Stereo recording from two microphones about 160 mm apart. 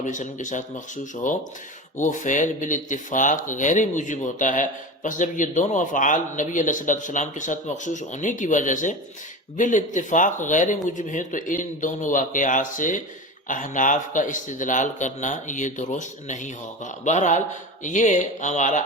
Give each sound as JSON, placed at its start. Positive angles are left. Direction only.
{"t": 0.0, "sound": "speech", "side_deg": 50}